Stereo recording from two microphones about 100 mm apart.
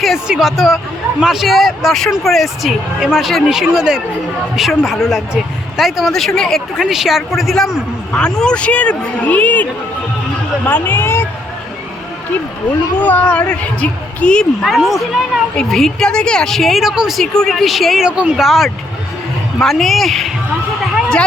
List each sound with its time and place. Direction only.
0.0 s a woman's voice: 5° right (ahead or behind); by 9.6 s 15° left (ahead or behind)
10.7 s speech: 20° left (ahead or behind)
13.0 s a man's voice: 20° left (ahead or behind)
14.6 s a woman's voice: centre (ahead or behind)